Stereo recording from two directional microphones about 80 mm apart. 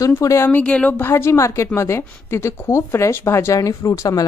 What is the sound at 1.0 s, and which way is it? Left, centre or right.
A woman's voice, left.